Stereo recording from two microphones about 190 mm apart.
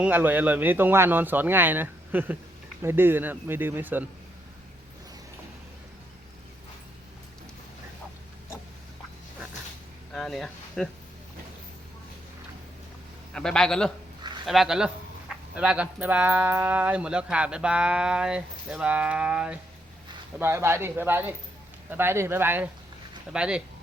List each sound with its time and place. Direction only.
0.0 s speech: 10° right (ahead or behind)
10.1 s a sound: centre (ahead or behind)
13.3 s speech: 5° left (ahead or behind)